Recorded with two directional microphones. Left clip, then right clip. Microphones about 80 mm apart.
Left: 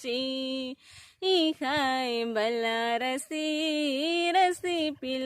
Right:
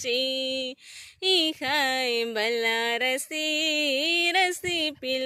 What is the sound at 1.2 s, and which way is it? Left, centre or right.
Speech, left.